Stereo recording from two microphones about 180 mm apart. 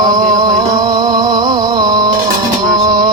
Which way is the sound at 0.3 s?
20° right (ahead or behind).